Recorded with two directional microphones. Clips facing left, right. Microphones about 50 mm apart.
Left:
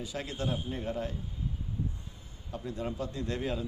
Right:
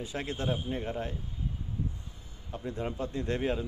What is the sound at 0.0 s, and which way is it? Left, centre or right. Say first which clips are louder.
Speech: right 1 dB; right.